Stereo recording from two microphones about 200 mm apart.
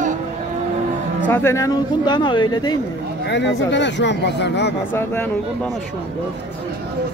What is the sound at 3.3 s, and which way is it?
Speech, 60° left (ahead or behind).